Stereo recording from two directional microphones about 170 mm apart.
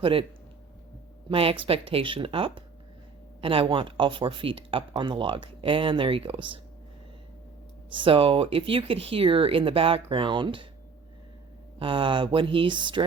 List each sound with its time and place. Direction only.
0.0 s speech: 35° right (ahead or behind)
1.3 s speech: 35° right (ahead or behind)
7.9 s speech: 30° right (ahead or behind)
11.8 s speech: 30° right (ahead or behind)